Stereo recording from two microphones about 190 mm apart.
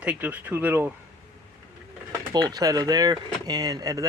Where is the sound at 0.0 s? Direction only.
5° right (ahead or behind).